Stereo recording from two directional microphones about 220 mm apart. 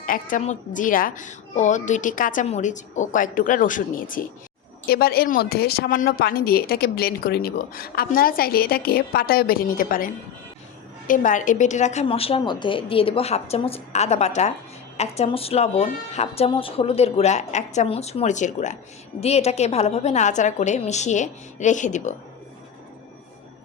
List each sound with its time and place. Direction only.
0.0 s a woman's voice: 40° left (ahead or behind)
11.1 s a woman's voice: 35° left (ahead or behind)